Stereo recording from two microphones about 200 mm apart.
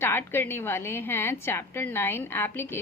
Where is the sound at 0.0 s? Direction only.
10° left (ahead or behind).